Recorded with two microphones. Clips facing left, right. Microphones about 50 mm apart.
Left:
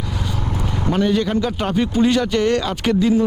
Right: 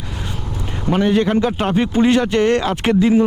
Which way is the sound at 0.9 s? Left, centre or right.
Right.